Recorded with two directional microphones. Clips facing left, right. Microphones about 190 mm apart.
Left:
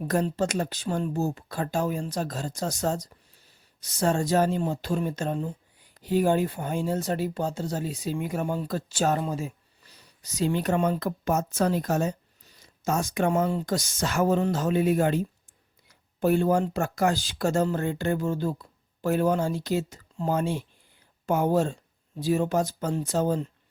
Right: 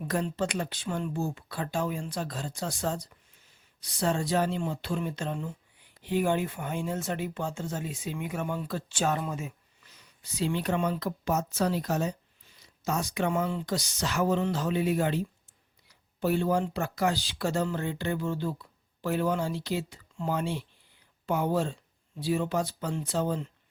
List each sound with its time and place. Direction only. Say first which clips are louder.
0.0 s speech: left 4 dB; 40° left (ahead or behind)